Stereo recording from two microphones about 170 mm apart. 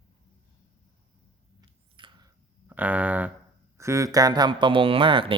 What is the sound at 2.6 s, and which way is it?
Speech, 10° right (ahead or behind).